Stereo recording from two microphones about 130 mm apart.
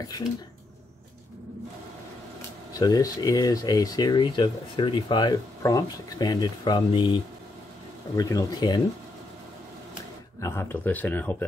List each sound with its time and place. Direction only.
0.0 s speech: 30° left (ahead or behind)
2.8 s speech: 30° left (ahead or behind)
8.2 s speech: 25° left (ahead or behind)
10.4 s speech: 20° left (ahead or behind)